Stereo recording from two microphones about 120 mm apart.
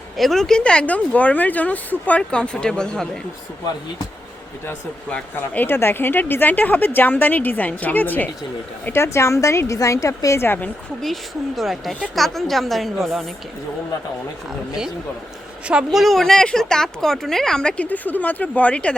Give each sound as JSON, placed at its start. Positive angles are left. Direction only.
{"t": 0.2, "sound": "speech", "side_deg": 5}
{"t": 5.1, "sound": "a woman's voice", "side_deg": 15}
{"t": 11.0, "sound": "a woman's voice", "side_deg": 0}
{"t": 15.6, "sound": "a woman's voice", "side_deg": -5}